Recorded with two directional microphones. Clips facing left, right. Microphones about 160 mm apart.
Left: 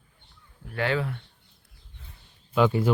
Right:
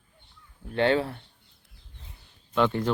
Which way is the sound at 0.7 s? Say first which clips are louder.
Right 4 dB; 30° right (ahead or behind).